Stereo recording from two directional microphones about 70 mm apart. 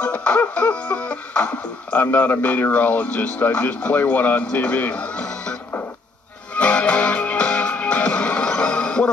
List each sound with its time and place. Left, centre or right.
0.0 s music: centre